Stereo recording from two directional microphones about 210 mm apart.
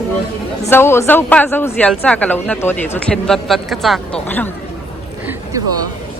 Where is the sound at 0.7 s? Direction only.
10° left (ahead or behind).